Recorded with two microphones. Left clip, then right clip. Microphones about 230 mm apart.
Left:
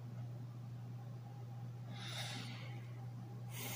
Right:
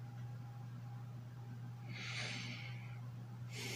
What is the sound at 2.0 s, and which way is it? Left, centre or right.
Snort, centre.